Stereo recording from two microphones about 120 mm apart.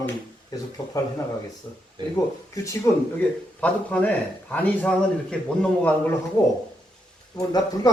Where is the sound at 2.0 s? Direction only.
40° right (ahead or behind).